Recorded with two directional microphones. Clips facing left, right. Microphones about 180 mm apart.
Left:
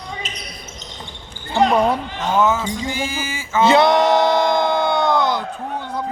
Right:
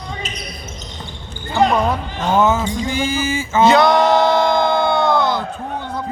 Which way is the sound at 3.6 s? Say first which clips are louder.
Right 1 dB; 25° left (ahead or behind).